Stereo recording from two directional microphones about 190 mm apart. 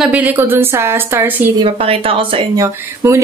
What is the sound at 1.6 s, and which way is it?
Speech, 30° right (ahead or behind).